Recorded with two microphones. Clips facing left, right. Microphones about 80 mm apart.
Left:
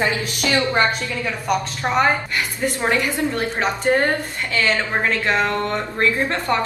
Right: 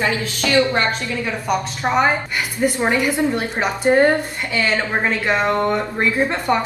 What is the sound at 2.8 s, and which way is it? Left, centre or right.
Speech, centre.